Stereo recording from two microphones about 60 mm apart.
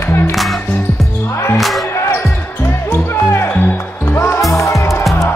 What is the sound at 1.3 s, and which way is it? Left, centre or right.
Music, left.